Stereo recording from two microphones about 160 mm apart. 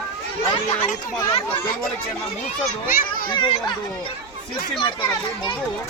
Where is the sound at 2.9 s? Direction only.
60° left (ahead or behind).